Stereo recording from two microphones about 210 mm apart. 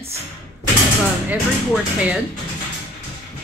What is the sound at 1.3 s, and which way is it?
Speech, 5° right (ahead or behind).